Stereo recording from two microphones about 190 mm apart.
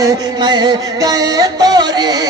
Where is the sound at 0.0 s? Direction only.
20° right (ahead or behind).